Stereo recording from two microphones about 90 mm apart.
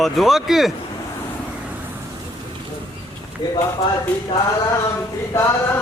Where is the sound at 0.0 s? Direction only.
Centre (ahead or behind).